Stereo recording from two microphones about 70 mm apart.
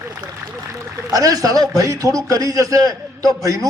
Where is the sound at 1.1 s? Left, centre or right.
Right.